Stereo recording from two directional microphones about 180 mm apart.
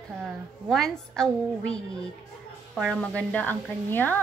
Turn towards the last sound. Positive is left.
turn(degrees=10)  # may be behind; listen again after turning